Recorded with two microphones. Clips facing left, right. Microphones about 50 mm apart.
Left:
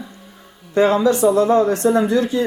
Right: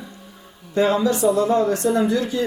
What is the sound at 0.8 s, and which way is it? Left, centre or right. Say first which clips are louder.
Speech: left 4 dB; left.